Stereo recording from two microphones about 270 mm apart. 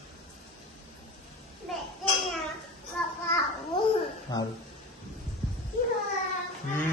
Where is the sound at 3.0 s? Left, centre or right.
Centre.